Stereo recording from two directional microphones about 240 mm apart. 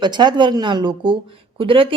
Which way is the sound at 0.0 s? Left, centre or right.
Centre.